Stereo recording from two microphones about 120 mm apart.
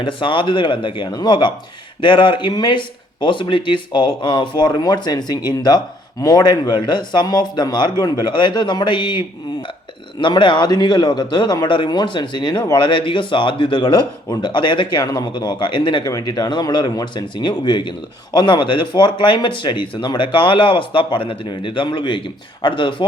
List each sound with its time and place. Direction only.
0.0 s speech: 45° left (ahead or behind)